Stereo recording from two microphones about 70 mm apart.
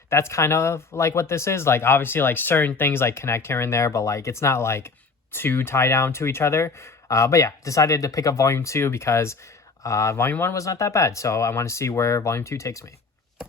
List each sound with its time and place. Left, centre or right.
0.1 s speech: left
10.2 s speech: left
10.5 s speech: left